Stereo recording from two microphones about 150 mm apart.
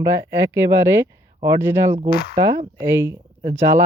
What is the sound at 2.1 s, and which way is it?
Speech, 90° left.